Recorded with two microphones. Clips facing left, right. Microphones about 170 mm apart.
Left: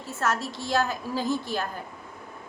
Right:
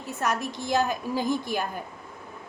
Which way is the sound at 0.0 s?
15° right (ahead or behind).